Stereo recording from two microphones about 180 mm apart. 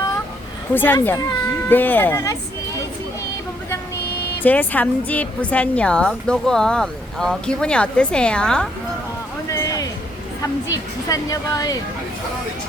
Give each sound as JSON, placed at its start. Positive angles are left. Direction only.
{"t": 0.7, "sound": "speech", "side_deg": 10}
{"t": 4.4, "sound": "a woman's voice", "side_deg": 10}
{"t": 9.5, "sound": "a sound", "side_deg": 20}
{"t": 10.4, "sound": "a woman's voice", "side_deg": 20}